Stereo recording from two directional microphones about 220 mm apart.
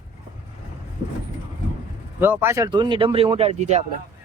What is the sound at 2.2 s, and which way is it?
Speech, 10° right (ahead or behind).